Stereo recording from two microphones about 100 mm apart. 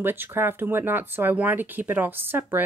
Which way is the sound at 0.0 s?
20° right (ahead or behind).